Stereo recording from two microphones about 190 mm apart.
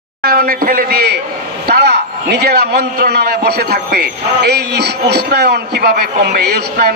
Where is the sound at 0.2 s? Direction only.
55° right (ahead or behind).